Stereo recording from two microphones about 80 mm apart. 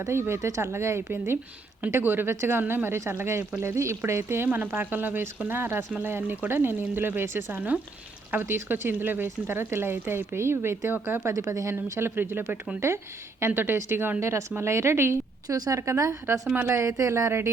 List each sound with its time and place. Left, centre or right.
0.0 s a woman's voice: right
15.4 s a woman's voice: right